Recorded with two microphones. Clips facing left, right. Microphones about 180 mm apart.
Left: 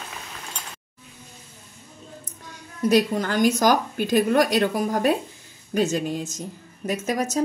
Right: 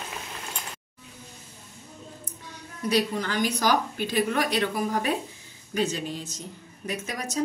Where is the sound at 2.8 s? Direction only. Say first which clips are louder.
Left 6 dB; 45° left (ahead or behind).